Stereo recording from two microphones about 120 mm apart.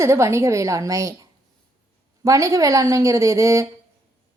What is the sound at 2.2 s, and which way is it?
A woman's voice, 25° right (ahead or behind).